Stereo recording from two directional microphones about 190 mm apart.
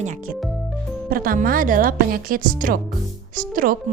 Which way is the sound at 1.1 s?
50° right (ahead or behind).